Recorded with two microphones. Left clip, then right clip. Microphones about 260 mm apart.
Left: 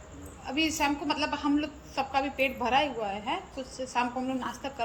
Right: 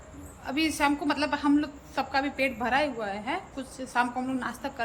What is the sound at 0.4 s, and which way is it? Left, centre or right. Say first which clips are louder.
A woman's voice: right 2 dB; centre.